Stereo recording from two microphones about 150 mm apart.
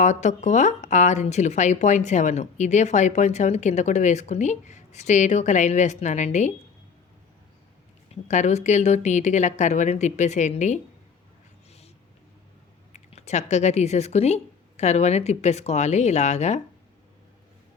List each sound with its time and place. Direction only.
0.0 s speech: 50° left (ahead or behind)
8.1 s speech: 50° left (ahead or behind)
12.9 s speech: 50° left (ahead or behind)